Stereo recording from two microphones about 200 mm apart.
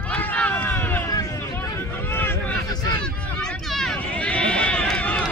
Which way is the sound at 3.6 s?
Centre (ahead or behind).